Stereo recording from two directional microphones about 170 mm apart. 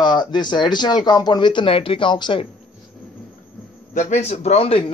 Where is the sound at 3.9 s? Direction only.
45° left (ahead or behind).